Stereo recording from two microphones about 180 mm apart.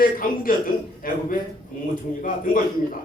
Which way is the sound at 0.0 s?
50° left (ahead or behind).